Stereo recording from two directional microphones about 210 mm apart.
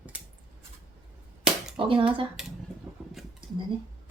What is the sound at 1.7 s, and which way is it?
Speech, 25° right (ahead or behind).